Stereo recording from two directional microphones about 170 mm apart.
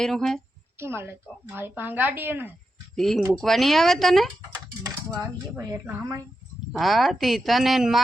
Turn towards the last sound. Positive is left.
turn(degrees=0)  # may be behind; listen again after turning